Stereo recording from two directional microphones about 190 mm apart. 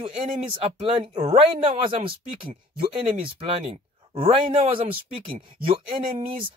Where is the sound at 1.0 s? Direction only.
25° right (ahead or behind).